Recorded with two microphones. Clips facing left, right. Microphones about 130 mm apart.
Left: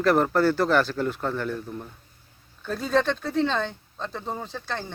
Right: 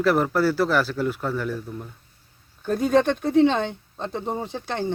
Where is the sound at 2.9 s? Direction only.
15° right (ahead or behind).